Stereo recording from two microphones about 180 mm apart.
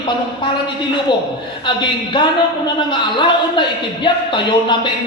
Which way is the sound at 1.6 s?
25° left (ahead or behind).